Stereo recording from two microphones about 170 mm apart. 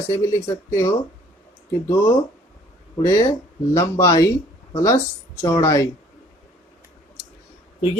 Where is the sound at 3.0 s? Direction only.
20° left (ahead or behind).